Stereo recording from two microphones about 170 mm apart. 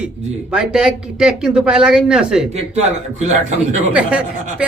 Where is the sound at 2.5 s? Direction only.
40° right (ahead or behind).